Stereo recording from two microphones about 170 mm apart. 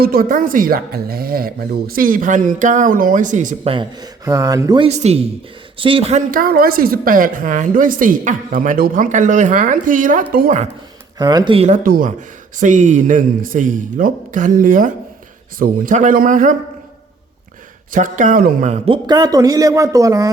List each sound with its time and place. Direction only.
0.0 s speech: 60° right (ahead or behind)
3.6 s speech: 30° right (ahead or behind)
4.9 s a woman's voice: 40° right (ahead or behind); by 10.6 s 55° right (ahead or behind)
11.2 s speech: 25° right (ahead or behind)
11.8 s a woman's voice: 55° right (ahead or behind)
17.9 s a woman's voice: 50° right (ahead or behind)
18.9 s speech: 25° right (ahead or behind)